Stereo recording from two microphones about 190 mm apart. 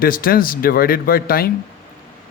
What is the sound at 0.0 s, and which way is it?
Speech, 50° left (ahead or behind).